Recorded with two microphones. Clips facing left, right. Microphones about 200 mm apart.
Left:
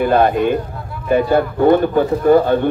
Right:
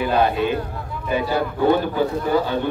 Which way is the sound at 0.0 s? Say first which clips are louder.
Left 5 dB; 55° left (ahead or behind).